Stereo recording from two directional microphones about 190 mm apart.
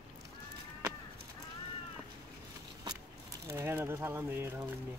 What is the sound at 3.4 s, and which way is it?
Speech, 15° right (ahead or behind).